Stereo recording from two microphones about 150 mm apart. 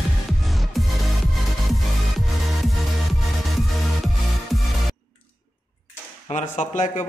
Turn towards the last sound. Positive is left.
turn(degrees=55)  # may be behind; listen again after turning